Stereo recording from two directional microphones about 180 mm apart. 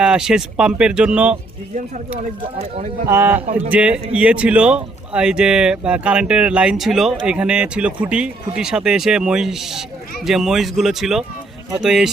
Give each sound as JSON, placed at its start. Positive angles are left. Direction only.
{"t": 0.0, "sound": "speech", "side_deg": -5}
{"t": 2.1, "sound": "speech", "side_deg": -35}
{"t": 3.1, "sound": "speech", "side_deg": -10}